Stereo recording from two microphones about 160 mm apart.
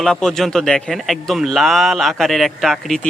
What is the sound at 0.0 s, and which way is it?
A man's voice, 5° left (ahead or behind).